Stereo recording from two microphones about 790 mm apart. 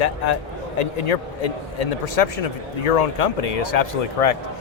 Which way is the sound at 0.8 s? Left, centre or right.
Left.